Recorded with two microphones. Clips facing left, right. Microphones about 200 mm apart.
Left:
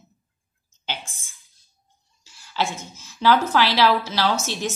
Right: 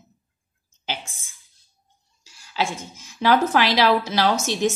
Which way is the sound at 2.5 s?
15° right (ahead or behind).